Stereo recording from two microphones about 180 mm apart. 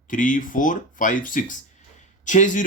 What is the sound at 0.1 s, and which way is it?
Speech, 45° left (ahead or behind).